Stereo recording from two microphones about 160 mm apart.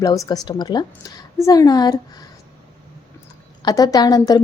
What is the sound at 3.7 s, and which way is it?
Speech, 25° left (ahead or behind).